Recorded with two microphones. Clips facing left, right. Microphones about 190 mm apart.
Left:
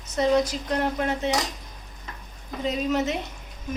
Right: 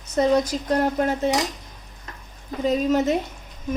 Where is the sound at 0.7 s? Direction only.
40° right (ahead or behind).